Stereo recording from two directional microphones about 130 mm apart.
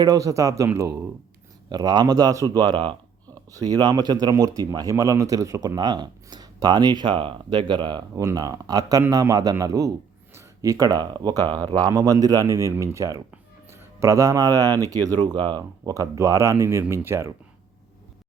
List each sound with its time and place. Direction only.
0.0 s speech: 30° right (ahead or behind)
1.7 s speech: 35° right (ahead or behind)